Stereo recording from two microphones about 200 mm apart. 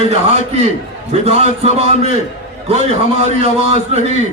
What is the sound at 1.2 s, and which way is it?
A man's voice, 30° right (ahead or behind).